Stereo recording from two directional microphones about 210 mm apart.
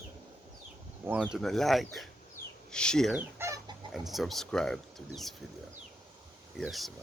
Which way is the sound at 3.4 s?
15° right (ahead or behind).